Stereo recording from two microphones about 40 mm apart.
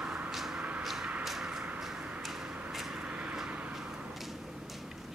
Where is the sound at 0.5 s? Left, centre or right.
Right.